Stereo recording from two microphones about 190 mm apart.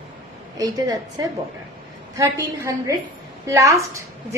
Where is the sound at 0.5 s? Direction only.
20° right (ahead or behind).